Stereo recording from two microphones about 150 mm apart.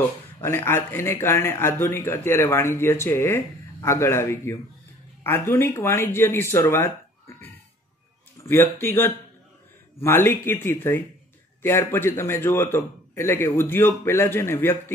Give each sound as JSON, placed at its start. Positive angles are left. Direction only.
{"t": 0.4, "sound": "a man's voice", "side_deg": 15}